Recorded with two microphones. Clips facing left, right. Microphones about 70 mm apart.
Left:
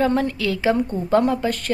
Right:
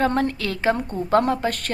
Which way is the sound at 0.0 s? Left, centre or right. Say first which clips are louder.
Left 1 dB; right.